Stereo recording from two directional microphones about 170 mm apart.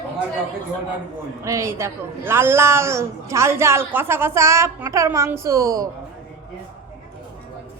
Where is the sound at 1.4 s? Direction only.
15° right (ahead or behind).